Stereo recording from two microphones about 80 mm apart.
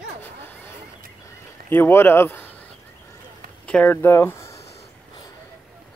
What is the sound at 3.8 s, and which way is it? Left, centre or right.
Speech, left.